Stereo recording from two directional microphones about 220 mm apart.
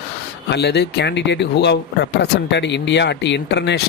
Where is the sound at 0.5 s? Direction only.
50° left (ahead or behind).